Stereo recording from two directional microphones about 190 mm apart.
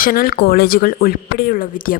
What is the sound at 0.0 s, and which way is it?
Speech, 50° left (ahead or behind).